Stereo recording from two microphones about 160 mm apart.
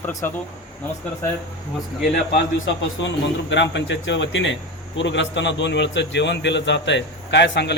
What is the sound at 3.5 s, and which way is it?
A man's voice, 90° left.